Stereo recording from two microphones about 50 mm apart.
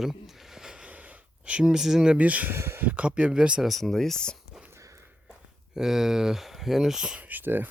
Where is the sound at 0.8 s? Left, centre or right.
Right.